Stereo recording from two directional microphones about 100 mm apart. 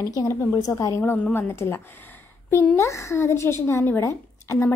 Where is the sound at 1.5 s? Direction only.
25° left (ahead or behind).